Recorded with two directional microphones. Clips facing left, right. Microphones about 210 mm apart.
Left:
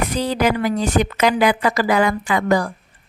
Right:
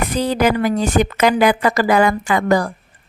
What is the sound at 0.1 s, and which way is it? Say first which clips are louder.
A woman's voice: right 2 dB; 50° right (ahead or behind).